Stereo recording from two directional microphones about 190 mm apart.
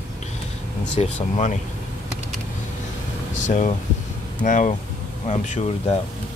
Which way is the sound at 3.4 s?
40° left (ahead or behind).